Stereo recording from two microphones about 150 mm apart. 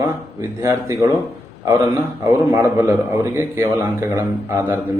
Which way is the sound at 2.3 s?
15° right (ahead or behind).